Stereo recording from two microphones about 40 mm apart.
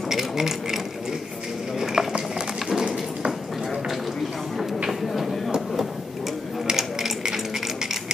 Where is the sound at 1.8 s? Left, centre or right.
Centre.